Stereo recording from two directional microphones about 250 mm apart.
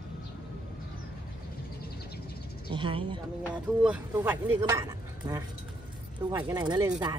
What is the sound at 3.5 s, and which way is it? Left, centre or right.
Speech, centre.